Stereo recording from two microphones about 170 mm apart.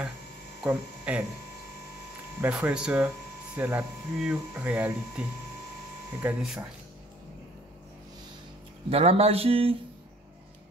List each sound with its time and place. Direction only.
0.7 s speech: 5° right (ahead or behind)
2.4 s speech: 10° right (ahead or behind)
6.2 s speech: 5° right (ahead or behind)
8.9 s speech: 35° right (ahead or behind)